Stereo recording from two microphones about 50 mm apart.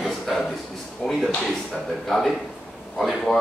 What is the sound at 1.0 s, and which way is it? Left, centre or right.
Speech, left.